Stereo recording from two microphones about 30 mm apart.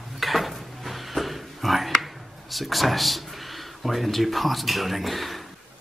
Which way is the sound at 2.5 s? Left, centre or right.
Centre.